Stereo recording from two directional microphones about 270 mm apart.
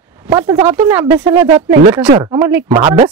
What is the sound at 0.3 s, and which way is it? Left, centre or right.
Speech, centre.